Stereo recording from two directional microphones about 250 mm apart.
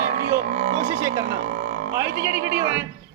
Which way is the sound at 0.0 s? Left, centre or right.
Right.